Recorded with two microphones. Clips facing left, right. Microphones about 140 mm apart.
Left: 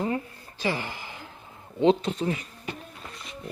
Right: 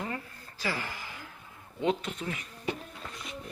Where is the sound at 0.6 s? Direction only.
25° left (ahead or behind).